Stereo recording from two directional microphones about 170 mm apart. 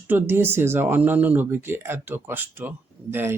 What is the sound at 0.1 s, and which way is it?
Speech, 10° right (ahead or behind).